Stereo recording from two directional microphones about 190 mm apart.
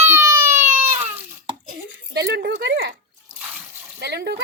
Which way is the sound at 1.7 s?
55° right (ahead or behind).